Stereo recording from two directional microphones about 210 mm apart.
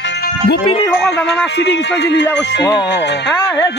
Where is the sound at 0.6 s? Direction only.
25° left (ahead or behind).